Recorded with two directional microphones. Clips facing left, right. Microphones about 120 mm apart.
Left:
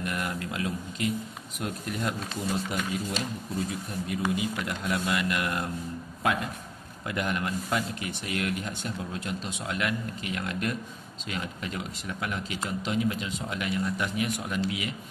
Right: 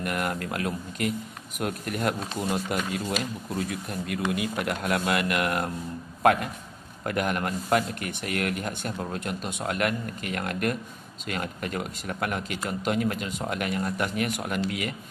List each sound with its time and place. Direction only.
0.0 s speech: 55° right (ahead or behind)